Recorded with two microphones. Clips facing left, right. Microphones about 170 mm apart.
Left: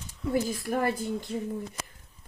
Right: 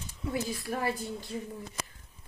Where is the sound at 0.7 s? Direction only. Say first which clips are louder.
Left 5 dB; 50° left (ahead or behind).